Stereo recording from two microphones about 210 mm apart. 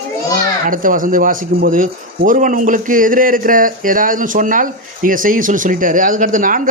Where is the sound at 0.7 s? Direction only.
40° right (ahead or behind).